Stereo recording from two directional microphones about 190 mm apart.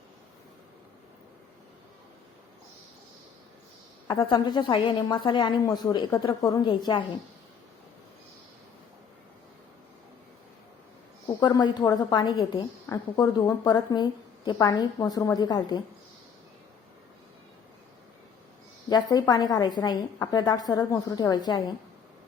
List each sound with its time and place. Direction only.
4.1 s a woman's voice: 20° left (ahead or behind)
11.3 s a woman's voice: 20° left (ahead or behind)
18.9 s a woman's voice: 20° left (ahead or behind)